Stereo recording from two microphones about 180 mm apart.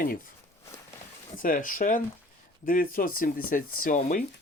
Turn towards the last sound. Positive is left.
turn(degrees=50)  # may be behind; listen again after turning